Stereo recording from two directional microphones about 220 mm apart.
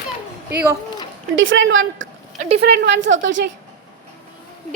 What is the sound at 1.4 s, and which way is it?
Speech, 60° right (ahead or behind).